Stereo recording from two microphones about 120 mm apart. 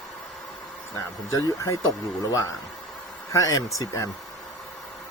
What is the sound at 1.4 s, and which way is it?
Speech, 30° left (ahead or behind).